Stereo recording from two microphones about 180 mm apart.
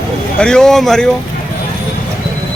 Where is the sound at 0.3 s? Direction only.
5° left (ahead or behind).